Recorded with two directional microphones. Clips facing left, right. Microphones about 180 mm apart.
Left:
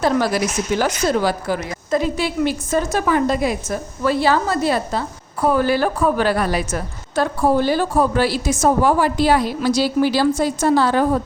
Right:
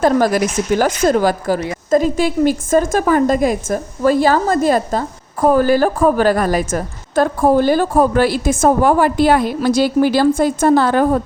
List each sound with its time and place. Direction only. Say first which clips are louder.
0.0 s a woman's voice: right 4 dB; 45° right (ahead or behind)